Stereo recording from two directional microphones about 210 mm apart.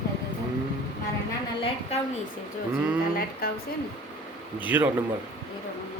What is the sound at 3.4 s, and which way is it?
Speech, 45° left (ahead or behind).